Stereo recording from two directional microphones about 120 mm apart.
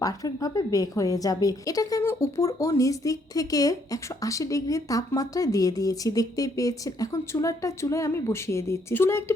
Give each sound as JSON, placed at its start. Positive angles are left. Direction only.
{"t": 0.0, "sound": "a woman's voice", "side_deg": 30}